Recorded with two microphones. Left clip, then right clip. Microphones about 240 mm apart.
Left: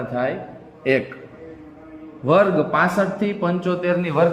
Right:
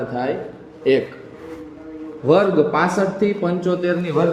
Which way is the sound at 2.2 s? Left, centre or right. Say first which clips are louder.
Right 1 dB; left.